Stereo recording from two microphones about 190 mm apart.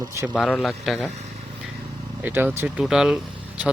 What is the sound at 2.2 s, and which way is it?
Speech, 10° right (ahead or behind).